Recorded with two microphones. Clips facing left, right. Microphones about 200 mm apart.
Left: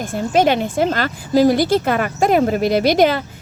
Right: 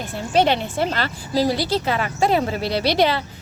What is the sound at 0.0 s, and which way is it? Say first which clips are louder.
A woman's voice: left 3 dB; 45° left (ahead or behind).